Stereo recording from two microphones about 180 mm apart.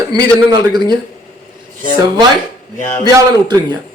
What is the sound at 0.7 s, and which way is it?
Speech, 25° right (ahead or behind).